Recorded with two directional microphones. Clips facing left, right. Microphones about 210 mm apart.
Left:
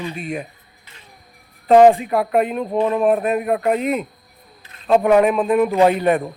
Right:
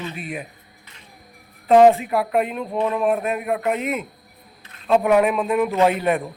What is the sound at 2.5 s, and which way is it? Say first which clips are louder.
Speech: left 4 dB; 35° left (ahead or behind).